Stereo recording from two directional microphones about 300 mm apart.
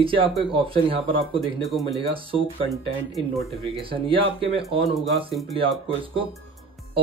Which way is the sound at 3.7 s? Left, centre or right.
Centre.